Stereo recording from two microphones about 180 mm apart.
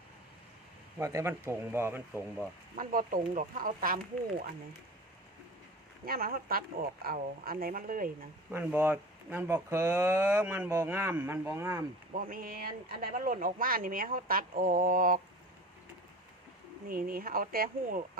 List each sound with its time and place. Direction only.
0.9 s speech: 15° right (ahead or behind)
2.7 s speech: 50° right (ahead or behind)
6.1 s speech: 55° right (ahead or behind)
8.4 s speech: 10° right (ahead or behind)
12.1 s speech: 50° right (ahead or behind)
16.9 s speech: 55° right (ahead or behind)